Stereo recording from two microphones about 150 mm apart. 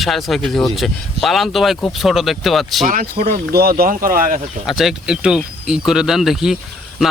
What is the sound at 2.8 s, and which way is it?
Speech, 65° right (ahead or behind).